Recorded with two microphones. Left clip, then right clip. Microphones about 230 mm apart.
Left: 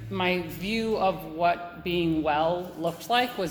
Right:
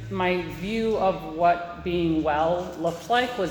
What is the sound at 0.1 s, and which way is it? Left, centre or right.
A man's voice, left.